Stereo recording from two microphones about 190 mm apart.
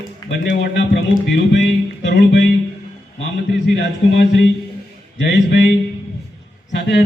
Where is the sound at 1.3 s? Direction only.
65° left (ahead or behind).